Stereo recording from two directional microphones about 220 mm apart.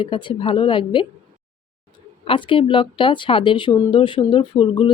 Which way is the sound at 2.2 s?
20° left (ahead or behind).